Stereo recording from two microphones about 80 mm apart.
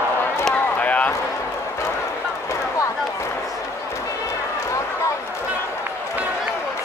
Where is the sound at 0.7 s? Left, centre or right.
Centre.